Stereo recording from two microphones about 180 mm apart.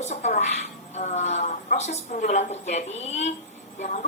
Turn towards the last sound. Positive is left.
turn(degrees=40)  # may be behind; listen again after turning